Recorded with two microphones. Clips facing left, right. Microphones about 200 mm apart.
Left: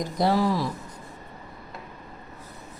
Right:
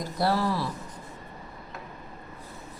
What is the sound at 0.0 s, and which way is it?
Speech, 15° left (ahead or behind).